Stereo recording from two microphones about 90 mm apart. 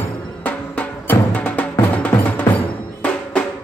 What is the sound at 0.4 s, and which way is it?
Music, 20° left (ahead or behind).